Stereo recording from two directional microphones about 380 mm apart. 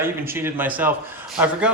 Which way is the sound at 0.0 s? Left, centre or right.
Centre.